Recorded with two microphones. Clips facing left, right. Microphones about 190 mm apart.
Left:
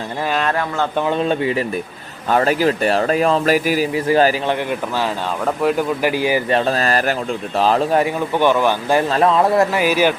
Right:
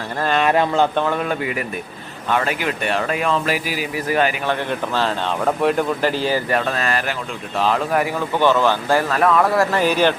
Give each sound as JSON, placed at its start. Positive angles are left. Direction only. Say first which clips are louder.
{"t": 0.2, "sound": "speech", "louder": "right 2 dB", "side_deg": 5}
{"t": 0.5, "sound": "speech", "louder": "right 4 dB", "side_deg": -20}
{"t": 0.9, "sound": "a man's voice", "louder": "left 3 dB", "side_deg": 20}
{"t": 3.9, "sound": "a man's voice", "louder": "left 3 dB", "side_deg": 30}
{"t": 4.4, "sound": "speech", "louder": "left 2 dB", "side_deg": 10}
{"t": 6.0, "sound": "speech", "louder": "left 2 dB", "side_deg": 10}
{"t": 6.5, "sound": "a man's voice", "louder": "left 3 dB", "side_deg": 30}
{"t": 8.4, "sound": "speech", "louder": "even", "side_deg": 15}
{"t": 9.0, "sound": "a man's voice", "louder": "left 3 dB", "side_deg": 25}
{"t": 9.7, "sound": "speech", "louder": "left 1 dB", "side_deg": 10}